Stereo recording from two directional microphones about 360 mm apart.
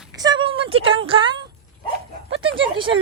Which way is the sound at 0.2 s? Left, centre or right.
Centre.